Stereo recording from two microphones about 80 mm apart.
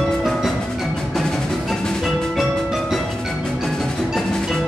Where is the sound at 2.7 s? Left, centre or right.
Centre.